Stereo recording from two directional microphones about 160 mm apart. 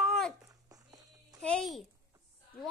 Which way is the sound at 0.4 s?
20° right (ahead or behind).